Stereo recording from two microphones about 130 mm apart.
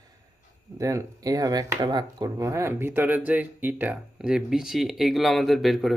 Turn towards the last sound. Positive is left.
turn(degrees=0)  # may be behind; listen again after turning